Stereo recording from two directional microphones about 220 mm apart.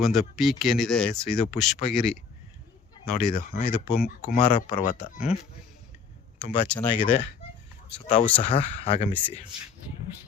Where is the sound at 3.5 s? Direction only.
45° left (ahead or behind).